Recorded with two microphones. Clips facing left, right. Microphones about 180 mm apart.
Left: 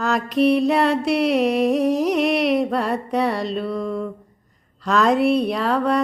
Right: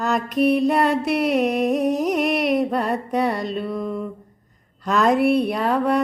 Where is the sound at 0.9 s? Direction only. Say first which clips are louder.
Left 1 dB; 5° right (ahead or behind).